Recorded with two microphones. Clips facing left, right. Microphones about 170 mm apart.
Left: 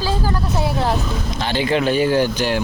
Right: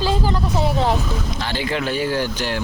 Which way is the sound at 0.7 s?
15° right (ahead or behind).